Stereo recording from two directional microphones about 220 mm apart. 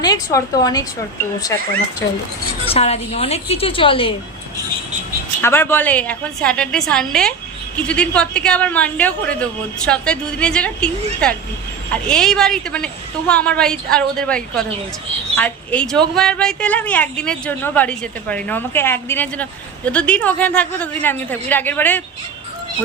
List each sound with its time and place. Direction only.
0.0 s a woman's voice: 15° left (ahead or behind)
2.6 s a woman's voice: 30° left (ahead or behind)
5.4 s a woman's voice: 10° left (ahead or behind)